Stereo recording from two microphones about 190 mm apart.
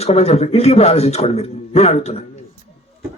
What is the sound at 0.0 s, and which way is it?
A man's voice, 35° left (ahead or behind).